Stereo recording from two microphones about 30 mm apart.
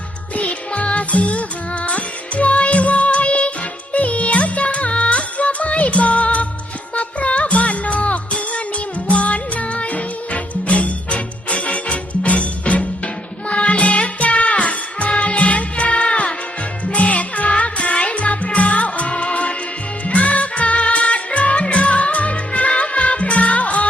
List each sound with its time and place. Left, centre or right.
0.3 s music: left